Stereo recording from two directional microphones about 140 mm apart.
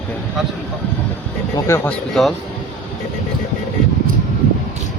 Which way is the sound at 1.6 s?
20° left (ahead or behind).